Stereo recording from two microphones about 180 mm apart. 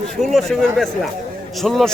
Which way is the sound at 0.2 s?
Centre (ahead or behind).